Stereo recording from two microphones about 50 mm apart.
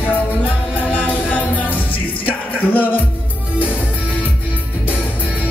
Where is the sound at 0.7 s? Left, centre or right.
Left.